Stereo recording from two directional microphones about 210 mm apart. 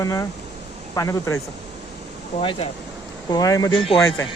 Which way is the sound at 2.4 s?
25° left (ahead or behind).